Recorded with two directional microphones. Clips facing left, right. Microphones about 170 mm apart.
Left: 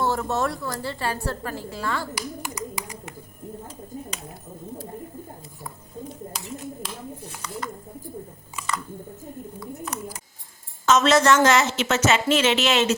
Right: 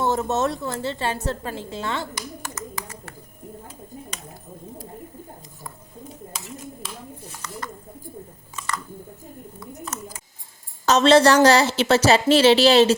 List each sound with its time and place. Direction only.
0.0 s a woman's voice: 20° right (ahead or behind)
2.4 s a sound: 15° left (ahead or behind)
10.8 s a woman's voice: 30° right (ahead or behind)